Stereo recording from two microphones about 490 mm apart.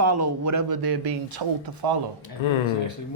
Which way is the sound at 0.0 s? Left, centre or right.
Right.